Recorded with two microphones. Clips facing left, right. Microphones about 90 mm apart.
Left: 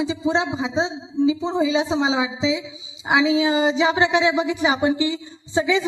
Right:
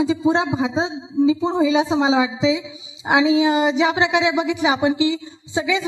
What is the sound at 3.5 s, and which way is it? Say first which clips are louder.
A woman's voice: right 1 dB; 30° left (ahead or behind).